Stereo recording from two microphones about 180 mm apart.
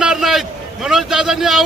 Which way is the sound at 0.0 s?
5° right (ahead or behind).